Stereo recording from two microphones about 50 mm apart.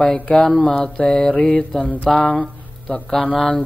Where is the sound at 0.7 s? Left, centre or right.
Centre.